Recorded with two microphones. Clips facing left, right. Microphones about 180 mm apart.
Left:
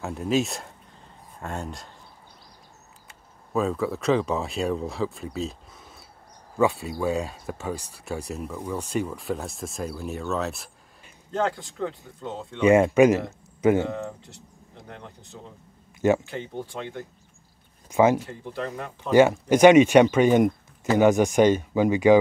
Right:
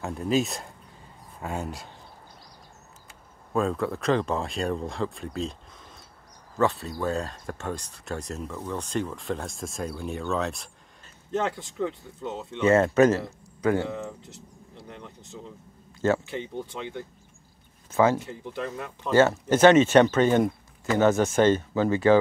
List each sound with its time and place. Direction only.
0.0 s speech: centre (ahead or behind)
3.1 s speech: centre (ahead or behind)
12.5 s speech: 15° left (ahead or behind)
16.0 s speech: 15° left (ahead or behind)
17.9 s speech: 15° left (ahead or behind)